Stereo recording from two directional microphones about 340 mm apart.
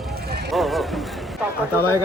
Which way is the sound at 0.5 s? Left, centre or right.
Centre.